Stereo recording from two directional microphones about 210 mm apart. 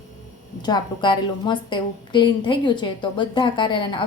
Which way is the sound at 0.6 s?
20° left (ahead or behind).